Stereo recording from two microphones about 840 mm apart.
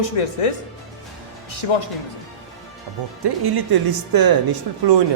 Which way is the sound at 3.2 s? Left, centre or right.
Right.